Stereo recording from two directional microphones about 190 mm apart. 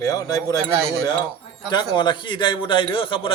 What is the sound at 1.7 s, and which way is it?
A man's voice, 25° left (ahead or behind).